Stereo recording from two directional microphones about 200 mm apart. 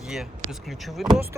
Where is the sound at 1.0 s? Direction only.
Centre (ahead or behind).